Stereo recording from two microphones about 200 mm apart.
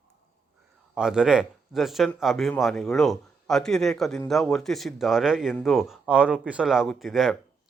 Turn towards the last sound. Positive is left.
turn(degrees=0)  # may be behind; listen again after turning